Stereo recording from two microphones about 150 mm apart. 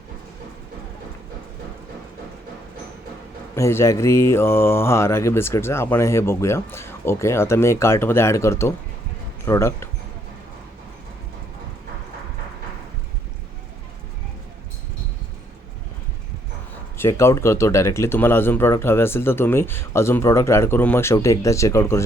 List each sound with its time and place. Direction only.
3.5 s mantra: 15° left (ahead or behind)
17.0 s mantra: 20° left (ahead or behind)